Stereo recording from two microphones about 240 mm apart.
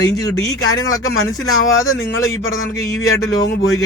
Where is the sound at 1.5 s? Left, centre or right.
Left.